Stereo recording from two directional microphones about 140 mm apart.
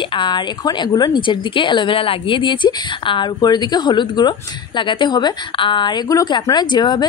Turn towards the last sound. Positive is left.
turn(degrees=30)  # may be behind; listen again after turning